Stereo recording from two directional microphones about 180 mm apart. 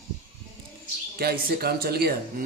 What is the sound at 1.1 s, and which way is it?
A man's voice, 60° right (ahead or behind).